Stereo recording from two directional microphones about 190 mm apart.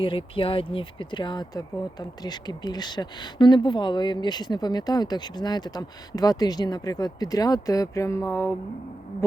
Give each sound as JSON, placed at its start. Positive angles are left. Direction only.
{"t": 0.0, "sound": "speech", "side_deg": 25}